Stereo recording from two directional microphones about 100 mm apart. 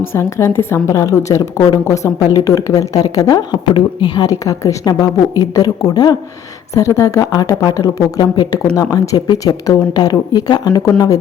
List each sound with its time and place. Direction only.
0.0 s a woman's voice: 25° left (ahead or behind)
6.7 s speech: 30° left (ahead or behind)
8.2 s speech: 50° left (ahead or behind)
8.7 s speech: 35° left (ahead or behind)